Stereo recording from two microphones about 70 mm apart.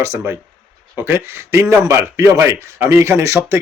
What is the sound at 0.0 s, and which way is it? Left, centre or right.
A man's voice, right.